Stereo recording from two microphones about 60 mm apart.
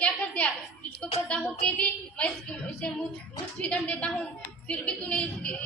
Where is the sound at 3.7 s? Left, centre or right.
Left.